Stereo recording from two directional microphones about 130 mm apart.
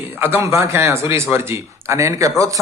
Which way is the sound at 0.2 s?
20° right (ahead or behind).